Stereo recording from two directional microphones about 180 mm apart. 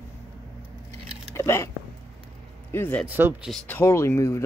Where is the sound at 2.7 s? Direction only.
10° left (ahead or behind).